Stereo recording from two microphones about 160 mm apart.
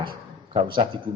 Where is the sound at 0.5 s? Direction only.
30° right (ahead or behind).